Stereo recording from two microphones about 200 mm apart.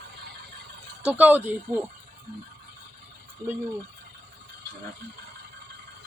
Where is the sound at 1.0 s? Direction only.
10° right (ahead or behind).